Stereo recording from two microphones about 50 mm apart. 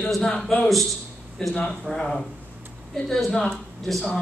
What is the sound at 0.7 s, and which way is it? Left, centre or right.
Speech, centre.